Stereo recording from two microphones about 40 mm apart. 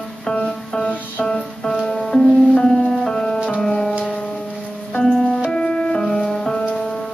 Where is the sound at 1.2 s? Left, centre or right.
Centre.